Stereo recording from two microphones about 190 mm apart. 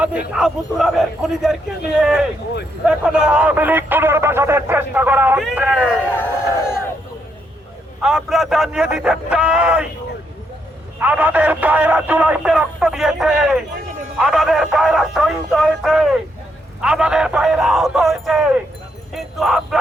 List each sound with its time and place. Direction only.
0.3 s speech: centre (ahead or behind)
6.1 s speech: 10° left (ahead or behind)
8.0 s speech: centre (ahead or behind)
11.0 s speech: 10° right (ahead or behind)